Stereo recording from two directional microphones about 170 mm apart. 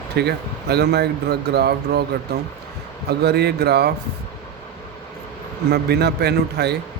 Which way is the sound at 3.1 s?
75° right (ahead or behind).